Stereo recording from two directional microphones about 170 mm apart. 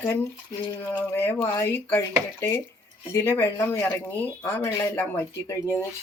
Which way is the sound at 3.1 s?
15° left (ahead or behind).